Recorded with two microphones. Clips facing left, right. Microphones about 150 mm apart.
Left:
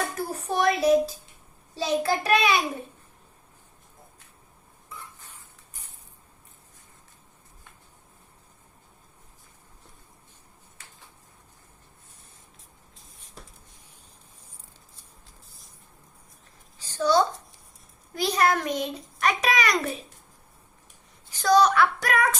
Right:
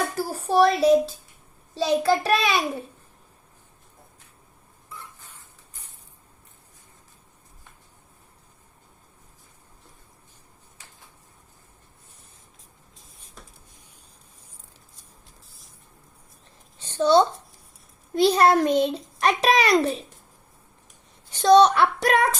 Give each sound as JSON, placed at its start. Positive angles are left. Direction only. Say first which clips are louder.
{"t": 0.2, "sound": "a child's voice", "louder": "right 9 dB", "side_deg": -30}
{"t": 17.0, "sound": "a child's voice", "louder": "right 4 dB", "side_deg": -25}
{"t": 21.2, "sound": "a child's voice", "louder": "right 5 dB", "side_deg": -25}